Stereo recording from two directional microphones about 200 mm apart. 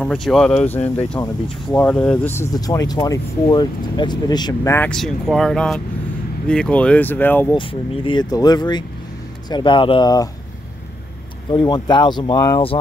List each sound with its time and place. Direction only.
0.0 s speech: 5° left (ahead or behind); by 4.7 s 20° left (ahead or behind)
4.7 s speech: 5° left (ahead or behind)
7.5 s speech: 25° left (ahead or behind)
11.5 s speech: 20° left (ahead or behind)